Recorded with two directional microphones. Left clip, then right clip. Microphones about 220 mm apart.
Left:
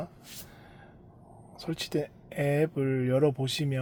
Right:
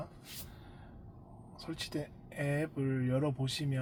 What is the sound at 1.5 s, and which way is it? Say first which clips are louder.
Speech: left 8 dB; 55° left (ahead or behind).